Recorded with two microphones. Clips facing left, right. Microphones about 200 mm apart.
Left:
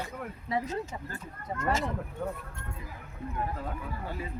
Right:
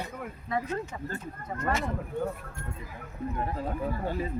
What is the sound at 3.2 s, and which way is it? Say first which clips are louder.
Speech: right 5 dB; 40° right (ahead or behind).